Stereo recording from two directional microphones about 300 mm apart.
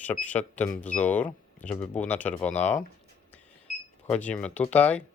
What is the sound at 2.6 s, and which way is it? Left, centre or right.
Speech, left.